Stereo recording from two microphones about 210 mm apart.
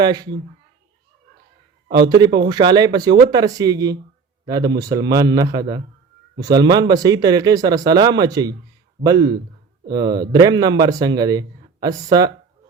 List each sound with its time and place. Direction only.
0.0 s speech: 20° right (ahead or behind)
1.9 s a man's voice: 20° right (ahead or behind)